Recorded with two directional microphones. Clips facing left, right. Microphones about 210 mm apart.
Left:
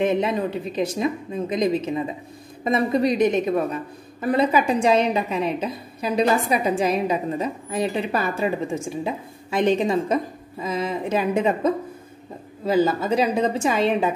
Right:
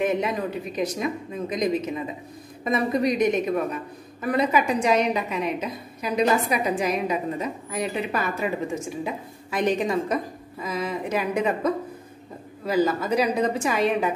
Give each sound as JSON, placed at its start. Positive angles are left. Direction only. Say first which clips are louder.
{"t": 0.0, "sound": "a woman's voice", "louder": "left 3 dB", "side_deg": 30}